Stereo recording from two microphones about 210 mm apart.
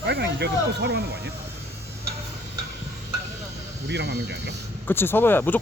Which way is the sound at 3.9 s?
55° right (ahead or behind).